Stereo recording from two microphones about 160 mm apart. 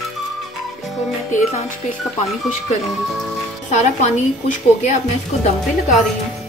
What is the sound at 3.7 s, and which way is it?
Speech, 50° left (ahead or behind).